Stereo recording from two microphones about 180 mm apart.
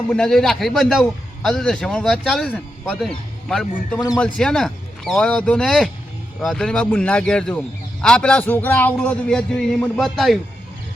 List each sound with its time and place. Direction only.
0.1 s a man's voice: 5° left (ahead or behind)